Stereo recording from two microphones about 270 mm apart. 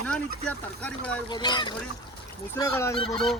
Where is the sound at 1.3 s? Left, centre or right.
Centre.